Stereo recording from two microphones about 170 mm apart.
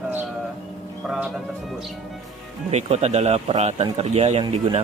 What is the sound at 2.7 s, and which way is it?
Speech, 40° right (ahead or behind).